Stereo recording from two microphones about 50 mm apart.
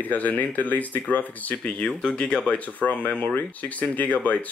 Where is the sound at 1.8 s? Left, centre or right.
Left.